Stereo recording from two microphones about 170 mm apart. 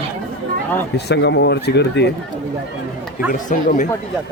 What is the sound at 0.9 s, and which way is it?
Speech, 85° left.